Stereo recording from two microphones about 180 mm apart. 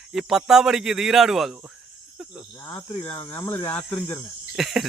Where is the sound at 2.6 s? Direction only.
20° left (ahead or behind).